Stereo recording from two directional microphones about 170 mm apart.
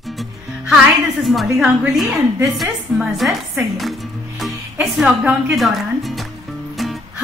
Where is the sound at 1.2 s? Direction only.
Centre (ahead or behind).